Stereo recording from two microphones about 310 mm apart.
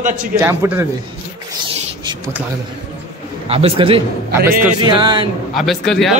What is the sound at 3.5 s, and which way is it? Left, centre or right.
A man's voice, centre.